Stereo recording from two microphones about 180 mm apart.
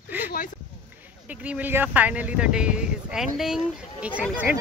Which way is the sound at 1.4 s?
10° right (ahead or behind).